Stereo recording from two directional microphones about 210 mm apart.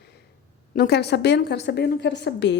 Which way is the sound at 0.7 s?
50° left (ahead or behind).